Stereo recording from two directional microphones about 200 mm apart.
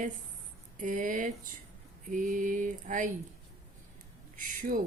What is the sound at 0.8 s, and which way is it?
Mantra, 40° right (ahead or behind).